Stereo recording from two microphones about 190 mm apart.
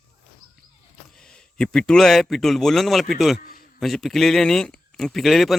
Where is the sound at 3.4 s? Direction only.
50° left (ahead or behind).